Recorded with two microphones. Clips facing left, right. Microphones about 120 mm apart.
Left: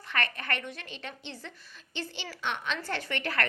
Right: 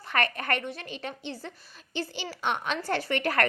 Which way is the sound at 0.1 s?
45° right (ahead or behind).